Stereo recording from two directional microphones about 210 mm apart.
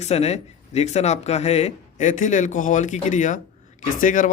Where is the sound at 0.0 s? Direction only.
30° left (ahead or behind).